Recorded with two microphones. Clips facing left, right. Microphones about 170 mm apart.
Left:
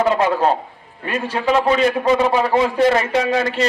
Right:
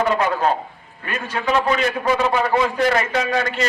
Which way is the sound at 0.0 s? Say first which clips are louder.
Left 3 dB; 30° left (ahead or behind).